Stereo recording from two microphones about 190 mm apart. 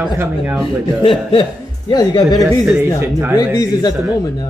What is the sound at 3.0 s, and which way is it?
Speech, 10° right (ahead or behind).